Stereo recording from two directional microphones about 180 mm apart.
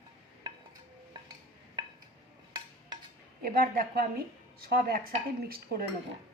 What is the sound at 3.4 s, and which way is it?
A woman's voice, 55° right (ahead or behind).